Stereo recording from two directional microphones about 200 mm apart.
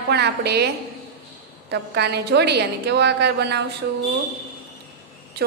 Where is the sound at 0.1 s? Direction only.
55° right (ahead or behind).